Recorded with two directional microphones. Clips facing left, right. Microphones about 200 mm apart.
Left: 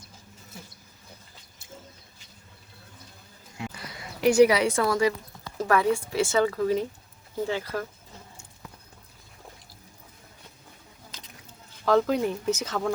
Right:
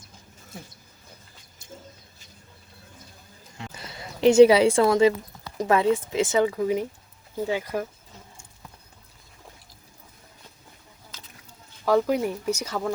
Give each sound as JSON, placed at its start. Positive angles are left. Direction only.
{"t": 3.7, "sound": "speech", "side_deg": -25}
{"t": 11.9, "sound": "speech", "side_deg": -10}